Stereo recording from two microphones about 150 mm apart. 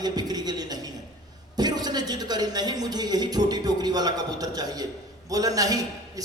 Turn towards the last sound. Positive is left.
turn(degrees=-25)  # may be behind; listen again after turning